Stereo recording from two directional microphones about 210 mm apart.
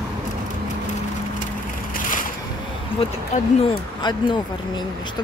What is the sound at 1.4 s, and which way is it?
Crushing, 40° left (ahead or behind).